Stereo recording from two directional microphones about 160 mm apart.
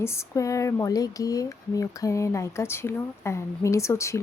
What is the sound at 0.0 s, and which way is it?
Speech, 20° left (ahead or behind).